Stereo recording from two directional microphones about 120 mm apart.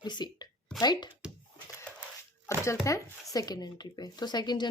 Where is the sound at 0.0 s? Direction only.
40° left (ahead or behind).